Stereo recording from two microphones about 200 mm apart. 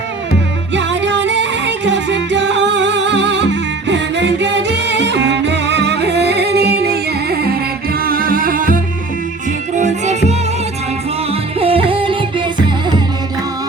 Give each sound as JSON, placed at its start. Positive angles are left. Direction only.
{"t": 0.7, "sound": "music", "side_deg": -65}